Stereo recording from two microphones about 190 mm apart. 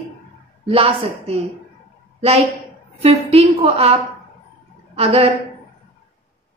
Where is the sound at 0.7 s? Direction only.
30° right (ahead or behind).